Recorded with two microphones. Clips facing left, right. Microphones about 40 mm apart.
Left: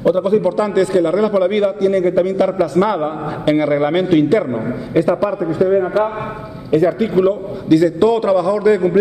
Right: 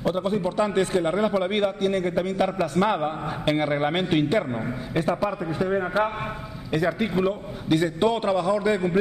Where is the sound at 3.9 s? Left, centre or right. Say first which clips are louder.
Left 9 dB; left.